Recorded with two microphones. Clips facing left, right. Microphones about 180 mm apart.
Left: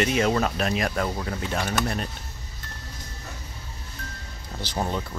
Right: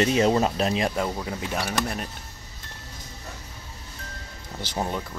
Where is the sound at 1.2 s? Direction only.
10° right (ahead or behind).